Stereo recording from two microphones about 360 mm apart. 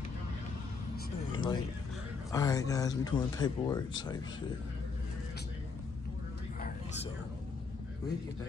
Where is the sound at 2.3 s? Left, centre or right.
Centre.